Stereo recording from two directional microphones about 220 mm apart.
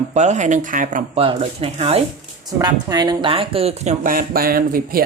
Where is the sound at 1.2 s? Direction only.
25° right (ahead or behind).